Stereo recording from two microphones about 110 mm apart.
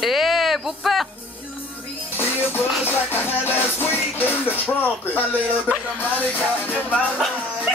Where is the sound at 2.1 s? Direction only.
20° left (ahead or behind).